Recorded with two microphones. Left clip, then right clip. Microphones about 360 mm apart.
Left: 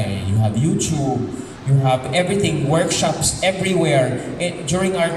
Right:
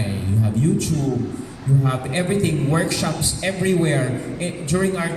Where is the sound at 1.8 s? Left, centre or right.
Centre.